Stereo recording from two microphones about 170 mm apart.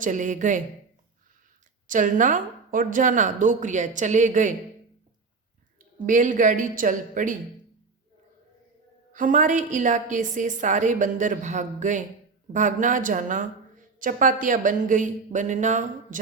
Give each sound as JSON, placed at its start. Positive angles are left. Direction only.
{"t": 0.0, "sound": "a woman's voice", "side_deg": -50}
{"t": 1.9, "sound": "a woman's voice", "side_deg": -50}
{"t": 6.1, "sound": "a woman's voice", "side_deg": -50}
{"t": 9.1, "sound": "a woman's voice", "side_deg": -50}